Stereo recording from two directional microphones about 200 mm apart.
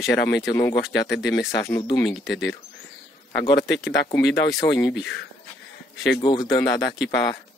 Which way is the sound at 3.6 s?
60° left (ahead or behind).